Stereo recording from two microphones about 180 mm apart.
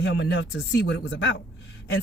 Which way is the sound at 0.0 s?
85° left.